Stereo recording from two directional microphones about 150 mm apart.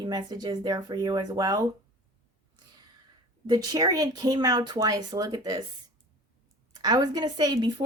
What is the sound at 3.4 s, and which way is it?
A woman's voice, 25° right (ahead or behind).